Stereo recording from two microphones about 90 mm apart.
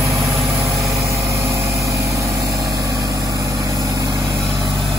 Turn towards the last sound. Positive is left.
turn(degrees=-40)  # may be behind; listen again after turning